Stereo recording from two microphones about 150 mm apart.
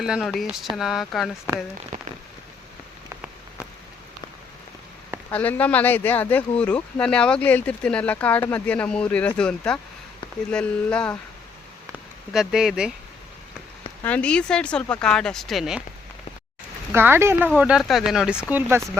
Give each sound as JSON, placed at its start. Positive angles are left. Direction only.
{"t": 0.0, "sound": "speech", "side_deg": 0}
{"t": 1.9, "sound": "rain on surface", "side_deg": -55}
{"t": 5.3, "sound": "speech", "side_deg": 10}
{"t": 11.9, "sound": "speech", "side_deg": -5}
{"t": 14.0, "sound": "speech", "side_deg": 10}
{"t": 16.9, "sound": "speech", "side_deg": -15}
{"t": 17.6, "sound": "speech", "side_deg": -5}